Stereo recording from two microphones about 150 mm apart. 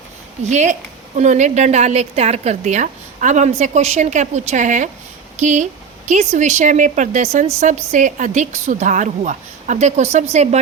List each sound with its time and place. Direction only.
0.4 s a woman's voice: 50° right (ahead or behind)